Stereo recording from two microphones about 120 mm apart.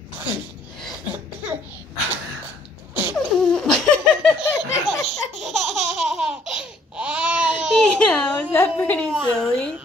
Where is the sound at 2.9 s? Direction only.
15° right (ahead or behind).